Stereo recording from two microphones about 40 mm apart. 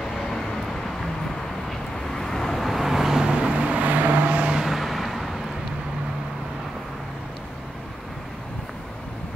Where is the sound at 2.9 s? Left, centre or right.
Centre; by 3.8 s right.